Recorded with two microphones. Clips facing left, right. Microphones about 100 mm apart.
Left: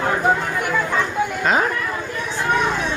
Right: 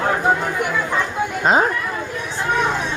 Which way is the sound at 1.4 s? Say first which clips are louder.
Right 4 dB; 25° right (ahead or behind).